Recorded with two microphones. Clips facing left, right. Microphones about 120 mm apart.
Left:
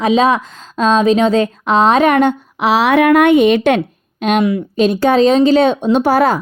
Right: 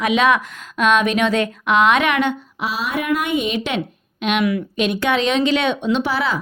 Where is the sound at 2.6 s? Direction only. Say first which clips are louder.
Left 13 dB; 70° left (ahead or behind); by 3.8 s 55° left (ahead or behind).